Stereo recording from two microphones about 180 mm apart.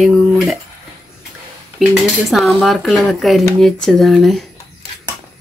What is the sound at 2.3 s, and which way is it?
Speech, centre (ahead or behind).